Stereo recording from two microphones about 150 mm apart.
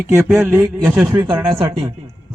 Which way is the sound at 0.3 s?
5° right (ahead or behind).